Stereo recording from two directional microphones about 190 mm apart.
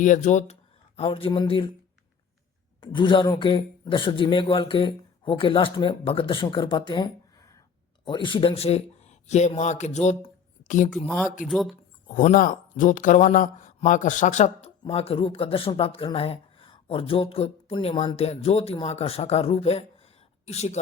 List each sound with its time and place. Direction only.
0.0 s speech: 40° left (ahead or behind)
0.9 s speech: 30° left (ahead or behind)
2.8 s speech: 25° left (ahead or behind); by 10.8 s 40° left (ahead or behind)
10.9 s speech: 10° left (ahead or behind)
12.0 s speech: 45° left (ahead or behind)